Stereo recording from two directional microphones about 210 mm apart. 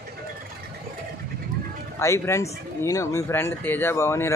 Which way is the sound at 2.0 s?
15° left (ahead or behind).